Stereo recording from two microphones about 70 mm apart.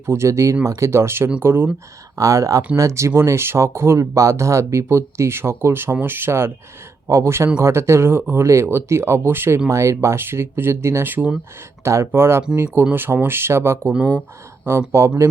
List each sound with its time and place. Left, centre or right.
0.0 s speech: right
2.1 s speech: right
9.6 s speech: right
11.8 s speech: right